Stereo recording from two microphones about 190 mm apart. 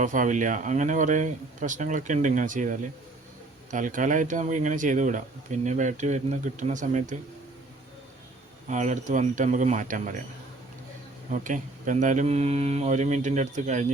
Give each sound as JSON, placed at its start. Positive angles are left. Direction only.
{"t": 0.0, "sound": "speech", "side_deg": -40}
{"t": 8.7, "sound": "speech", "side_deg": -40}
{"t": 11.3, "sound": "speech", "side_deg": -40}